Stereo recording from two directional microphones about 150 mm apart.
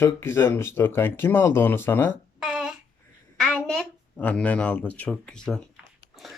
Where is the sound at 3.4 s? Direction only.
5° left (ahead or behind).